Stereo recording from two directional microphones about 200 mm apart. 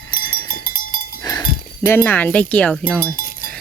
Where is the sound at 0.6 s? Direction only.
45° left (ahead or behind).